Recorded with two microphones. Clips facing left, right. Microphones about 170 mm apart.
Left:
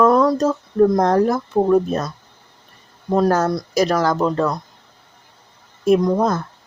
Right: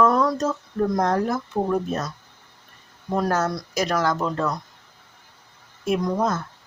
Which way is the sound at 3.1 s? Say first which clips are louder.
Left 6 dB; 35° left (ahead or behind).